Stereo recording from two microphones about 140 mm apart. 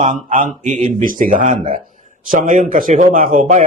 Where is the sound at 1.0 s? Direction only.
80° right.